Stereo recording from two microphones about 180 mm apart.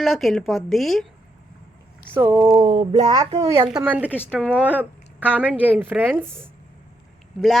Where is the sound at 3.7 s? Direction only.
5° right (ahead or behind).